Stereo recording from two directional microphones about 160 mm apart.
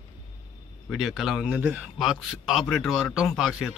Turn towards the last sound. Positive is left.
turn(degrees=-5)  # may be behind; listen again after turning